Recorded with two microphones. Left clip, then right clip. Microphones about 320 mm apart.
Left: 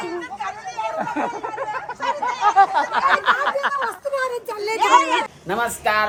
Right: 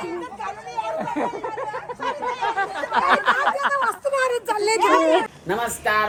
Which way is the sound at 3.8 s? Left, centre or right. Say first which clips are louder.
Right 2 dB; right.